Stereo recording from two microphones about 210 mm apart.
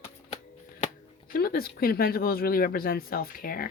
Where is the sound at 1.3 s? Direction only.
45° left (ahead or behind).